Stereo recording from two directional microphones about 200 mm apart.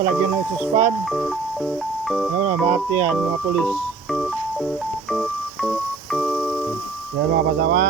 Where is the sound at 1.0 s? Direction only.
Centre (ahead or behind).